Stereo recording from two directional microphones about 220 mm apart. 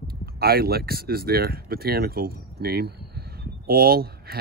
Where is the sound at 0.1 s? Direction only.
45° right (ahead or behind).